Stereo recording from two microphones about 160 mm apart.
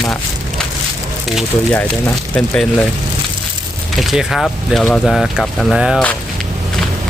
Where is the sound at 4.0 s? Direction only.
Centre (ahead or behind).